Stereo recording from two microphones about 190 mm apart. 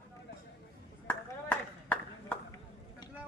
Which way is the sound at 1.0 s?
10° left (ahead or behind).